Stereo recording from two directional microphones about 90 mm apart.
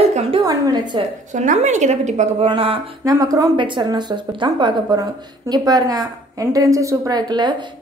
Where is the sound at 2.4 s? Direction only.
90° right.